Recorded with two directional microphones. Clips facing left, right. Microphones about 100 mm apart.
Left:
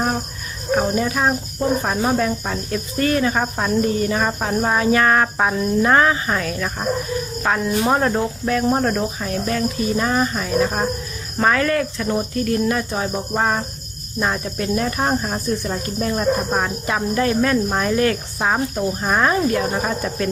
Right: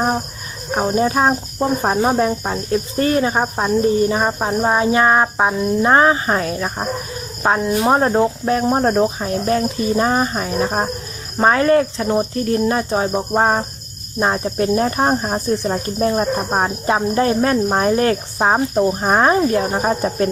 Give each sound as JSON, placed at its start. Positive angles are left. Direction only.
{"t": 0.8, "sound": "speech", "side_deg": -25}